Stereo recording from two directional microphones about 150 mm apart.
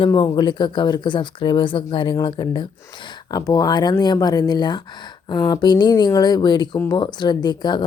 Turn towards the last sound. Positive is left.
turn(degrees=30)  # may be behind; listen again after turning